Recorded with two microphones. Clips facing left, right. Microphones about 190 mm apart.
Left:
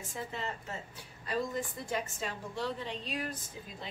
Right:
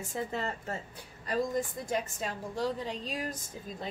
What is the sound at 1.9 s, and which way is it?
A woman's voice, 40° right (ahead or behind).